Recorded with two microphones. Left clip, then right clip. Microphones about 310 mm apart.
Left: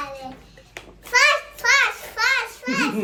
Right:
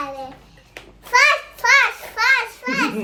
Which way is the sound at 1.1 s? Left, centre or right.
Right.